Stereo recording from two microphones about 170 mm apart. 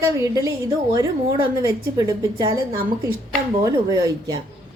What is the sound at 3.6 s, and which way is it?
Speech, 20° right (ahead or behind).